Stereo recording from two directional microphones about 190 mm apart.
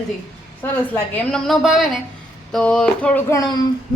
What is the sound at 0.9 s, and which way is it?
A woman's voice, 5° left (ahead or behind).